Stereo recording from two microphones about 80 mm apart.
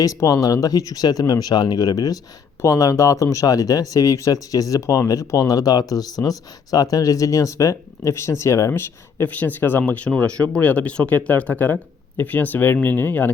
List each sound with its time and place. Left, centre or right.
0.0 s speech: left
9.2 s speech: left